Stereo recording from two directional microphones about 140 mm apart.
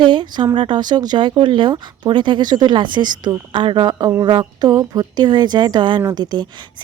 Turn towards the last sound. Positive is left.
turn(degrees=-30)  # may be behind; listen again after turning